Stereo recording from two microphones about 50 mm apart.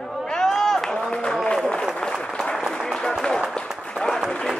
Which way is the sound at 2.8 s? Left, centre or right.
Centre.